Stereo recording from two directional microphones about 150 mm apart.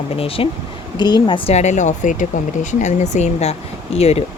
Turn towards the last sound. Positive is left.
turn(degrees=45)  # may be behind; listen again after turning